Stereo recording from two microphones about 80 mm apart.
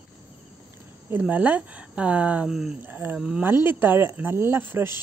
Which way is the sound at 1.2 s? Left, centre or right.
Right.